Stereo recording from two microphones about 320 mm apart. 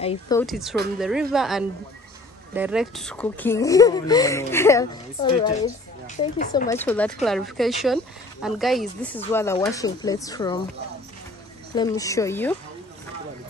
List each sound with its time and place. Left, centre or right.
0.0 s speech: centre
0.4 s speech: centre
6.0 s speech: left
6.7 s speech: centre
11.7 s speech: centre